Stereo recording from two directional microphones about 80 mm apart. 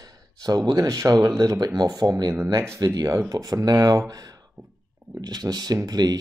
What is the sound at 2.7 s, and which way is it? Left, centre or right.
Speech, right.